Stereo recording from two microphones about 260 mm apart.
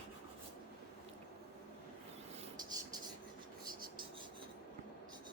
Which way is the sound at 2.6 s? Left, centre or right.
Centre.